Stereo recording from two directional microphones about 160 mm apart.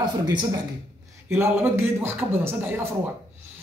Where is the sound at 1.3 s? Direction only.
15° right (ahead or behind).